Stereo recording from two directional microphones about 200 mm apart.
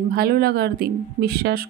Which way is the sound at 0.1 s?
50° right (ahead or behind).